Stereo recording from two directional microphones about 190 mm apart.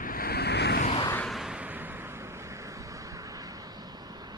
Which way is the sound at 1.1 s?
5° left (ahead or behind).